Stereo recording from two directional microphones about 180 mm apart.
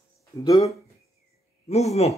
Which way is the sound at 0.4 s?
20° left (ahead or behind).